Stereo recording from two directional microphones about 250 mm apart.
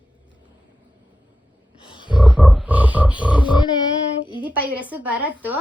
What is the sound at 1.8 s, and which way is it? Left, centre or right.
Wild animals, centre.